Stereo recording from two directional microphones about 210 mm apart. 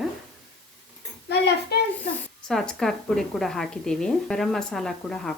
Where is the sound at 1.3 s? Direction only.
50° left (ahead or behind).